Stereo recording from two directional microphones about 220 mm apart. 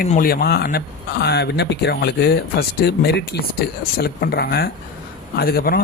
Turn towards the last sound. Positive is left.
turn(degrees=45)  # may be behind; listen again after turning